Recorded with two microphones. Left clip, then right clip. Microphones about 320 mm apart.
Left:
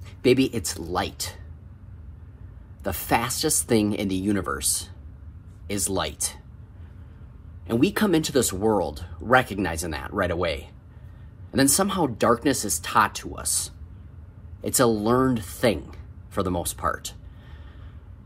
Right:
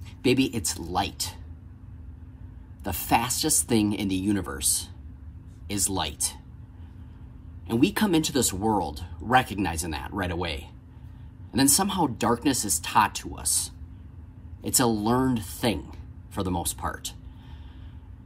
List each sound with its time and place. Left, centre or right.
0.2 s speech: centre
2.8 s speech: centre
7.6 s speech: centre